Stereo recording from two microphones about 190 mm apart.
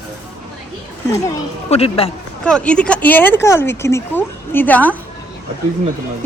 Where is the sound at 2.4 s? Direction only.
5° left (ahead or behind).